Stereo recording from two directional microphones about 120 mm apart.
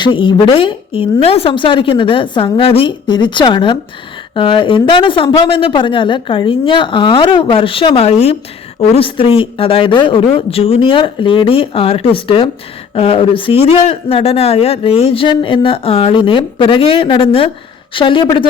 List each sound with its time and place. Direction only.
0.0 s speech: 40° left (ahead or behind); by 8.4 s 60° left (ahead or behind)
9.0 s speech: 50° left (ahead or behind)